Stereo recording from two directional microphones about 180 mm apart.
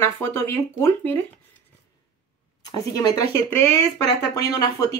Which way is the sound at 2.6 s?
20° left (ahead or behind).